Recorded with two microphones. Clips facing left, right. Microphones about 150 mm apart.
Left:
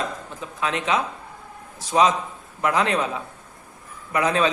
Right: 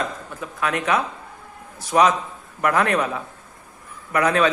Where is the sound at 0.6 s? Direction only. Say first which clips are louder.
Right 1 dB; 20° left (ahead or behind).